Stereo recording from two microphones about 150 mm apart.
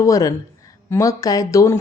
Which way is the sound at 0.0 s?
20° left (ahead or behind).